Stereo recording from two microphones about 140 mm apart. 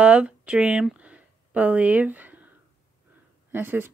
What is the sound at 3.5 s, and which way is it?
Speech, 15° right (ahead or behind).